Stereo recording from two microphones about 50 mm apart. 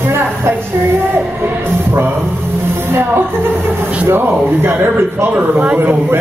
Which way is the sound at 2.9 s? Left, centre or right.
Right.